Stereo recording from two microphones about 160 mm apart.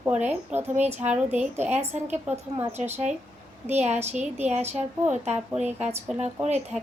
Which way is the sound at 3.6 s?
45° right (ahead or behind).